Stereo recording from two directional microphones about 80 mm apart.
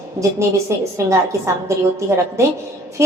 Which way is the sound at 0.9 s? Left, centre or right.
Right.